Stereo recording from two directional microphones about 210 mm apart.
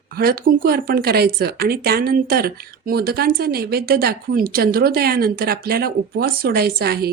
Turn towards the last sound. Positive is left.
turn(degrees=-50)  # may be behind; listen again after turning